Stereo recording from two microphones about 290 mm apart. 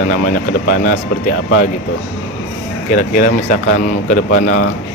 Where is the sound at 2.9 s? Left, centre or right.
Left.